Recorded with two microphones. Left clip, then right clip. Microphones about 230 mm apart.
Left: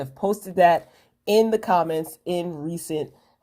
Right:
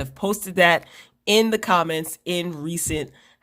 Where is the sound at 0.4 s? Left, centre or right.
Right.